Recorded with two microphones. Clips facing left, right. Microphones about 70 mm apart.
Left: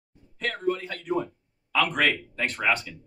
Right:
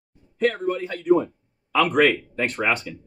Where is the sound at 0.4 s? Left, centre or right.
Centre.